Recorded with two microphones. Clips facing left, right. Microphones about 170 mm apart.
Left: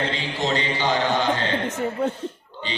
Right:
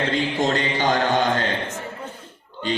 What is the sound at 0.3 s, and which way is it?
Speech, 50° right (ahead or behind).